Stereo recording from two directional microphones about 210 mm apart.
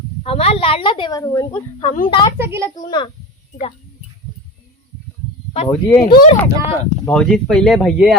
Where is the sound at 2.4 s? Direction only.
10° right (ahead or behind).